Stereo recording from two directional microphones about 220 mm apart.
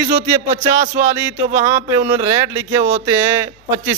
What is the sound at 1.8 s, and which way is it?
Speech, 10° right (ahead or behind).